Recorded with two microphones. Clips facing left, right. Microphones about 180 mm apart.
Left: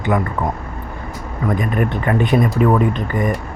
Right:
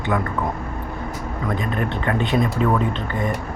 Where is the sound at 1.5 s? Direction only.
10° left (ahead or behind).